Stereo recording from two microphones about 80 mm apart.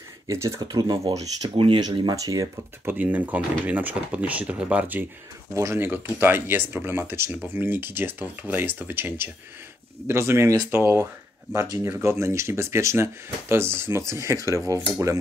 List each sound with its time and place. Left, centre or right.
0.3 s speech: right
0.6 s speech: right
1.6 s speech: right
2.1 s speech: right
2.8 s speech: right
5.5 s speech: right
5.8 s speech: right